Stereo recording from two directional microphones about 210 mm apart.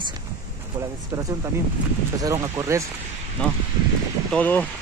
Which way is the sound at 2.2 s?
15° right (ahead or behind).